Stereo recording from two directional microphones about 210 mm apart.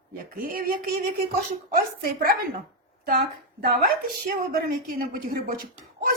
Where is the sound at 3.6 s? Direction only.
45° right (ahead or behind).